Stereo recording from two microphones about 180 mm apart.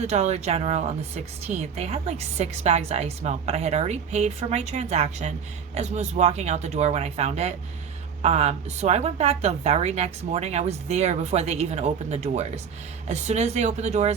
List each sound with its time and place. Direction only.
0.0 s a woman's voice: 40° right (ahead or behind)